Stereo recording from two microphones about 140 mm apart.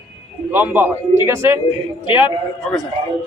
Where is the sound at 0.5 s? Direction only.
15° right (ahead or behind).